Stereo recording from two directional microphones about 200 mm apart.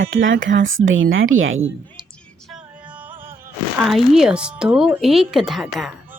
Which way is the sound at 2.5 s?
5° right (ahead or behind).